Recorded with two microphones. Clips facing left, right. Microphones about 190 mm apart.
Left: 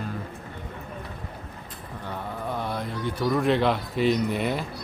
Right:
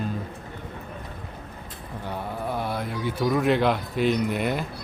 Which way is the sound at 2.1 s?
5° right (ahead or behind).